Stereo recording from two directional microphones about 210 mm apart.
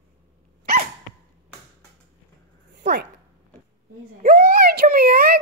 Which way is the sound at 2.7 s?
55° right (ahead or behind).